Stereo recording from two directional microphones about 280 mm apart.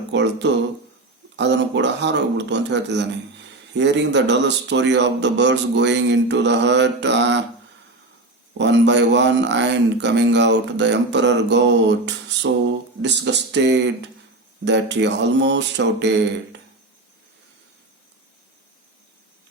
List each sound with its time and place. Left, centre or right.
0.1 s a man's voice: right
8.5 s a man's voice: right